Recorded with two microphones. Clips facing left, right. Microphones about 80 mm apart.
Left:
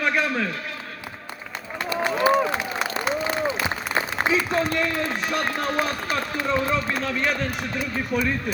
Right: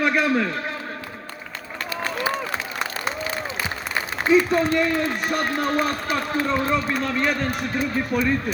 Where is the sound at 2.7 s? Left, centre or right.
Centre.